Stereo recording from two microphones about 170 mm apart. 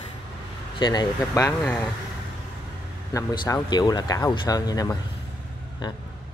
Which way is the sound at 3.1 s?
25° left (ahead or behind).